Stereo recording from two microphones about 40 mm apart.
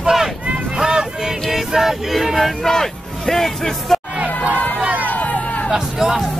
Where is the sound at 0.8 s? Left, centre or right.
Centre.